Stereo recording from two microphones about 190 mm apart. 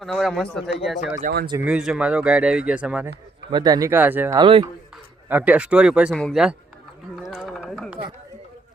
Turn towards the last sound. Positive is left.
turn(degrees=0)  # may be behind; listen again after turning